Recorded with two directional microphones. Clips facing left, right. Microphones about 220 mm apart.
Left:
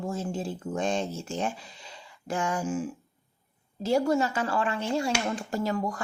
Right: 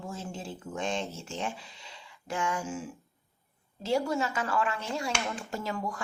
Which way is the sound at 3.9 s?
40° left (ahead or behind).